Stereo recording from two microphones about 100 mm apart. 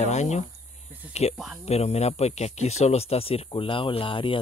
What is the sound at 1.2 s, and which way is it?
Speech, 90° left.